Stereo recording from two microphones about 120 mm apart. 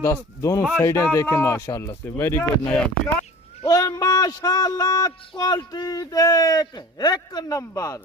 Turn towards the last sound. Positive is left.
turn(degrees=25)  # may be behind; listen again after turning